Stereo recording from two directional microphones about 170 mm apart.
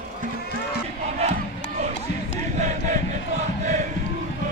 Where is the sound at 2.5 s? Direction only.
45° right (ahead or behind).